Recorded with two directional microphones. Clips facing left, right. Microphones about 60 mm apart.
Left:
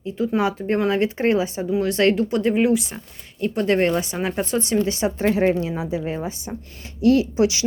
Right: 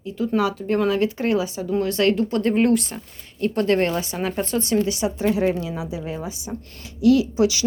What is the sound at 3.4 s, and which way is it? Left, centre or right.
A woman's voice, centre.